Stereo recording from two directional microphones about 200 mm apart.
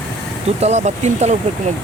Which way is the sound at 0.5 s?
35° right (ahead or behind).